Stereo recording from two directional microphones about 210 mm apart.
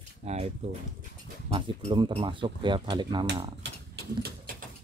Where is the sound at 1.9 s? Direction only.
25° right (ahead or behind).